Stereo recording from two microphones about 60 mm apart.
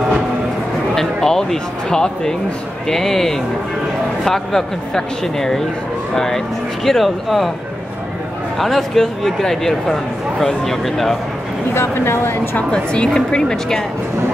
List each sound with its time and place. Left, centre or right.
0.9 s speech: centre
8.5 s speech: centre
11.7 s speech: left
12.7 s speech: centre